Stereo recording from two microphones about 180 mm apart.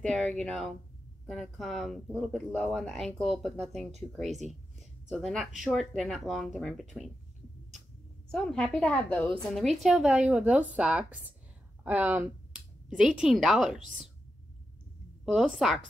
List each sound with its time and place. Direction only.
0.0 s speech: 5° left (ahead or behind)
5.1 s speech: 5° left (ahead or behind)
8.3 s a woman's voice: 5° left (ahead or behind)
15.2 s speech: centre (ahead or behind)